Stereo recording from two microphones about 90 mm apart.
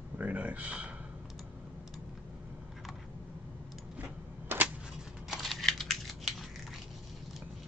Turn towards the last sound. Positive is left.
turn(degrees=0)  # may be behind; listen again after turning